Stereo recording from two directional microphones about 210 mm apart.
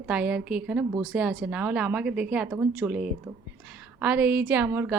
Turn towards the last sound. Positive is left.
turn(degrees=-10)  # may be behind; listen again after turning